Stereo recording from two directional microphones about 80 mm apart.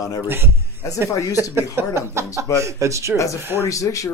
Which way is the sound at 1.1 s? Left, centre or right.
Left.